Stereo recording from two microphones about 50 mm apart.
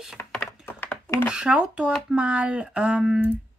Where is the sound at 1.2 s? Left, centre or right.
Centre.